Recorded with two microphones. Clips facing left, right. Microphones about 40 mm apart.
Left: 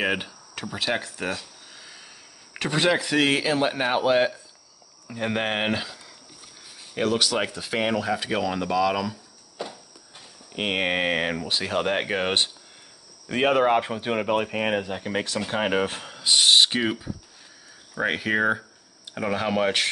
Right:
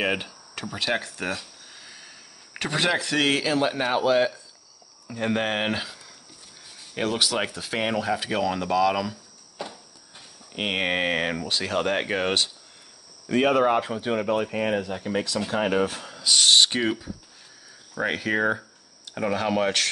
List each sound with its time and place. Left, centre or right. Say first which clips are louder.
0.0 s speech: even; centre
5.0 s speech: right 1 dB; centre
7.0 s speech: left 1 dB; centre
13.3 s speech: even; left
16.4 s speech: even; centre